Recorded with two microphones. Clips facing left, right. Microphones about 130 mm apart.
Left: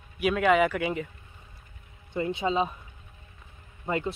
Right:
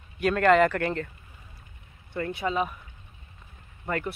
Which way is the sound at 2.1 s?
20° left (ahead or behind).